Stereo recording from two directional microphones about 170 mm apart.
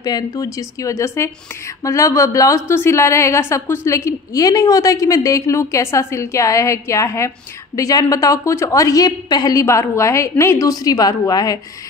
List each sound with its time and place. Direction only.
0.0 s a woman's voice: 20° left (ahead or behind)